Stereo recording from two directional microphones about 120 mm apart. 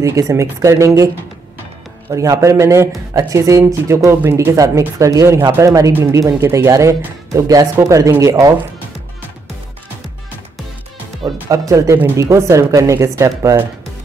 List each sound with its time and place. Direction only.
0.0 s speech: 25° right (ahead or behind)
11.5 s speech: 25° right (ahead or behind)